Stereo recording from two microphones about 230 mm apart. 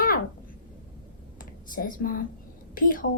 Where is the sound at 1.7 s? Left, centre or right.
Left.